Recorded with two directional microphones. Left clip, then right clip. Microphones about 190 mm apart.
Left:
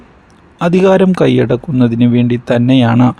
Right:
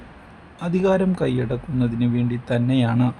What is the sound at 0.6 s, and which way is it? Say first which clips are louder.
Speech: left 11 dB; 45° left (ahead or behind).